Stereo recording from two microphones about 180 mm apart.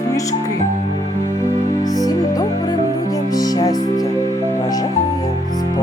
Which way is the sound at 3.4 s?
20° left (ahead or behind).